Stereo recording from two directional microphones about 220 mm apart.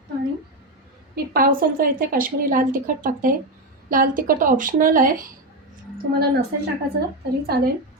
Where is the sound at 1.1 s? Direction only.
40° right (ahead or behind).